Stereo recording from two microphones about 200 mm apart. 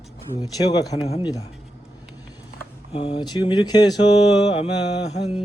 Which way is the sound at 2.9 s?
30° left (ahead or behind).